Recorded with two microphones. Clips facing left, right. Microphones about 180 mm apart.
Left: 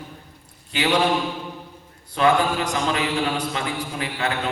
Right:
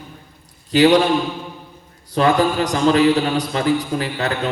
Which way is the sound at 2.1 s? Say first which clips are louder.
Right 3 dB; 35° right (ahead or behind).